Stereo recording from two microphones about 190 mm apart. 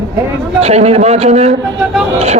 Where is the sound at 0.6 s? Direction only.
35° right (ahead or behind).